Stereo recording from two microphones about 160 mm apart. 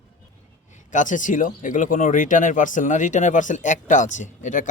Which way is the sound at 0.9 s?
50° left (ahead or behind).